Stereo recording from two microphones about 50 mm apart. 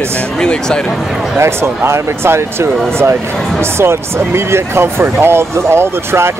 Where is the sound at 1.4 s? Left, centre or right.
Right.